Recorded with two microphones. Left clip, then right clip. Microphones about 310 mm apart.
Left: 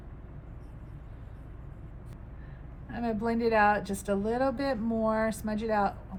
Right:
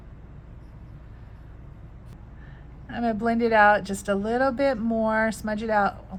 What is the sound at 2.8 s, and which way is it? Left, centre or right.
Speech, right.